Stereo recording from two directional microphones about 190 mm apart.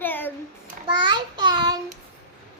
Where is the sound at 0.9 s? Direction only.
25° right (ahead or behind).